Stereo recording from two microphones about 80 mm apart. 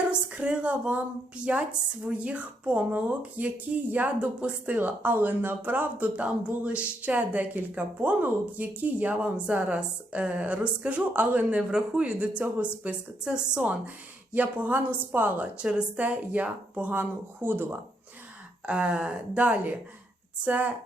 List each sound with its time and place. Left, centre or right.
0.1 s a woman's voice: centre
18.6 s speech: centre